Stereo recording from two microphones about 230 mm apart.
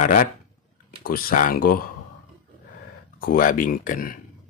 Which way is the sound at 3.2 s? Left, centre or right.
Left.